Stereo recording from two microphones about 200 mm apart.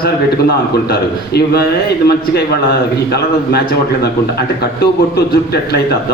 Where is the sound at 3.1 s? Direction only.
50° left (ahead or behind).